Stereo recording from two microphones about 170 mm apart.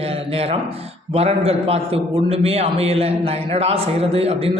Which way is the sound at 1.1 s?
35° right (ahead or behind).